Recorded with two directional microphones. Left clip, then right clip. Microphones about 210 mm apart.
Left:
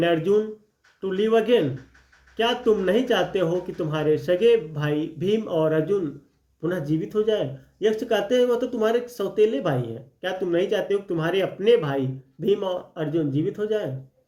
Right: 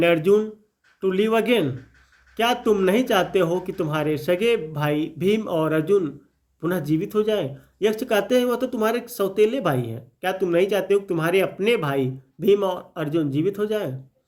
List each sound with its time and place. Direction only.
0.0 s speech: 40° right (ahead or behind)